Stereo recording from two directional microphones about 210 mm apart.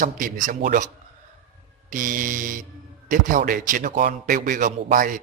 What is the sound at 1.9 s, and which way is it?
A man's voice, 40° right (ahead or behind).